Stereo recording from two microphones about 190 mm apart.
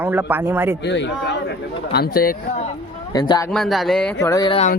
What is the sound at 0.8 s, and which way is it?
Speech, 65° left (ahead or behind).